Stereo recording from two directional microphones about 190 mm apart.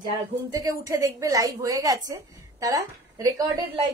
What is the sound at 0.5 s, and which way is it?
A woman's voice, 20° right (ahead or behind).